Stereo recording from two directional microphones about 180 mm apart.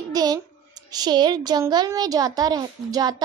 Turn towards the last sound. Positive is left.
turn(degrees=-20)  # may be behind; listen again after turning